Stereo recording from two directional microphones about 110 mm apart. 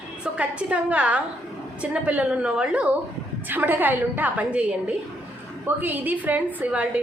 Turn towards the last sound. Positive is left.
turn(degrees=-10)  # may be behind; listen again after turning